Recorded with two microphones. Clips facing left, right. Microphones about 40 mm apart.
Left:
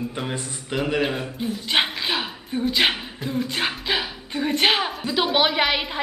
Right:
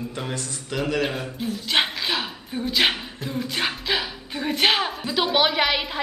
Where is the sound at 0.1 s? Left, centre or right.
Centre.